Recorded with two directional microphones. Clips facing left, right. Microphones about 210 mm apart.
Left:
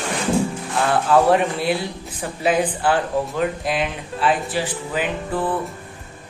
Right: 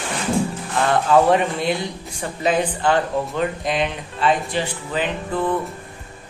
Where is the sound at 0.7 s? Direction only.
Centre (ahead or behind).